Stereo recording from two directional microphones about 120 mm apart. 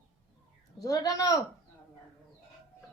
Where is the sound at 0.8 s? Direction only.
30° left (ahead or behind).